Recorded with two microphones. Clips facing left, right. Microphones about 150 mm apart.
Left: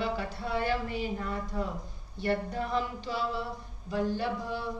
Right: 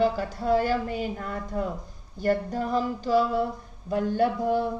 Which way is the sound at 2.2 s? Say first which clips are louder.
Right 5 dB; 40° right (ahead or behind).